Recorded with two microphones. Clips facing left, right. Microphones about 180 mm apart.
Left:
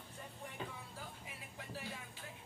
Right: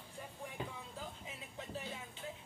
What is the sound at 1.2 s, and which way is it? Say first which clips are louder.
Music: right 3 dB; 20° right (ahead or behind).